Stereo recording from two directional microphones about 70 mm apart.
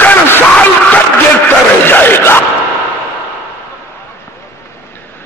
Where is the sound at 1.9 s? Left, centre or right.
Left.